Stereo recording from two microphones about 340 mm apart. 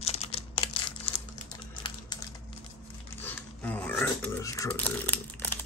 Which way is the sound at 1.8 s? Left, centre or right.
Centre.